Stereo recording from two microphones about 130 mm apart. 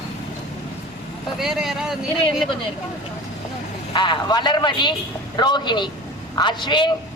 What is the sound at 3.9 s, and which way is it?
Speech, 35° left (ahead or behind).